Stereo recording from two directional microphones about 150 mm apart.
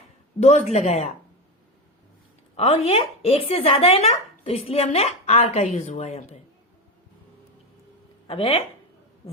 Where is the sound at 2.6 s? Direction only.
40° left (ahead or behind).